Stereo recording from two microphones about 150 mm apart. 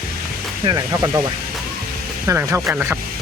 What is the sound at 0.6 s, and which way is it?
Speech, 25° right (ahead or behind).